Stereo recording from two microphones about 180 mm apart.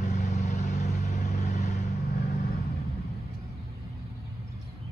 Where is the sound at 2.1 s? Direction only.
60° left (ahead or behind).